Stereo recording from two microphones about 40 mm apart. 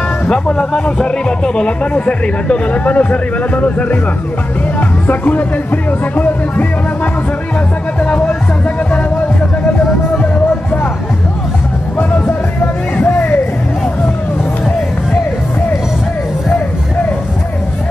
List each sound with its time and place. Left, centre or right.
0.7 s speech: left
13.1 s music: left